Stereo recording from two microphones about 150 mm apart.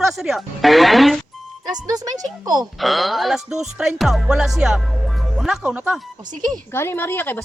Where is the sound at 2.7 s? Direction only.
Centre (ahead or behind).